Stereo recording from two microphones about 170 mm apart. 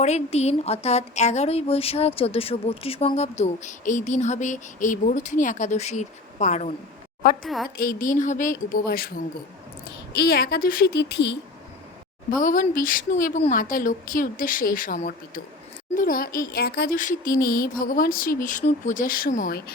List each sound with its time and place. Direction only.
0.0 s speech: 40° left (ahead or behind)
7.4 s a woman's voice: centre (ahead or behind)
7.8 s a woman's voice: 55° left (ahead or behind)
10.2 s a woman's voice: 65° left (ahead or behind); by 11.3 s 85° left
12.4 s a woman's voice: 50° left (ahead or behind)
16.5 s a woman's voice: 75° left (ahead or behind)
17.0 s a woman's voice: 50° left (ahead or behind)